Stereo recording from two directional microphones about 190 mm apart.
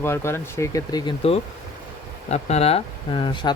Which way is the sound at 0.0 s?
15° left (ahead or behind).